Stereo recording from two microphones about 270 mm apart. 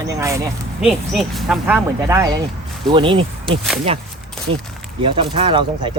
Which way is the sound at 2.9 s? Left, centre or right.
Centre.